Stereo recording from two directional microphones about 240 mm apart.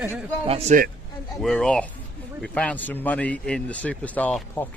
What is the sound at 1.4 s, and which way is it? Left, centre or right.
Speech, centre.